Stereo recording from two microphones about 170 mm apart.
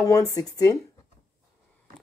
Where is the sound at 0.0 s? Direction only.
20° left (ahead or behind).